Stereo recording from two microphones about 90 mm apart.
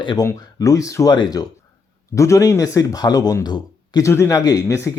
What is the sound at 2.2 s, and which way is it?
Speech, 35° left (ahead or behind).